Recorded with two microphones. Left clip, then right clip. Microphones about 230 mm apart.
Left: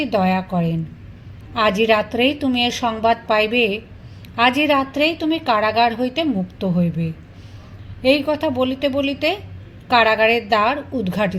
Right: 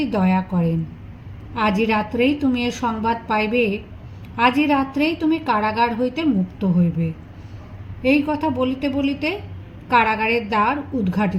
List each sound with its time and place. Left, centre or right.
0.0 s a woman's voice: left